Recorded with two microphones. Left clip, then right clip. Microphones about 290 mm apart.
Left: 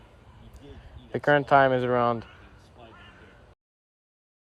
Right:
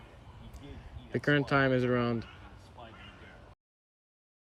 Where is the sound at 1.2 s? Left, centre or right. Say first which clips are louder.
Left 8 dB; centre.